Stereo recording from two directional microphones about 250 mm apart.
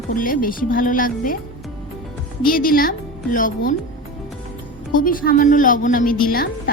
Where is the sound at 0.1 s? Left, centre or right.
Left.